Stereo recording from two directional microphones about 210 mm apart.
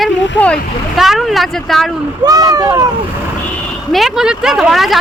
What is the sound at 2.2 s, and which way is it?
Speech, 15° right (ahead or behind).